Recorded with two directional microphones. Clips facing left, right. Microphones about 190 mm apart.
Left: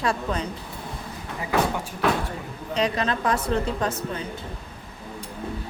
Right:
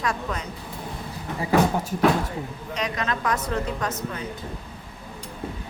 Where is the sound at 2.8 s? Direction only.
30° left (ahead or behind).